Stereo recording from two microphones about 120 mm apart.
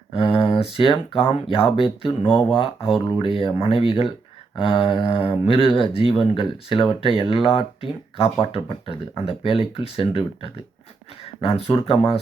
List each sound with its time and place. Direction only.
0.1 s speech: 50° left (ahead or behind)